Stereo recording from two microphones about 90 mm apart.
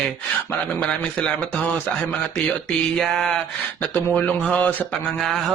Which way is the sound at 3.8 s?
20° left (ahead or behind).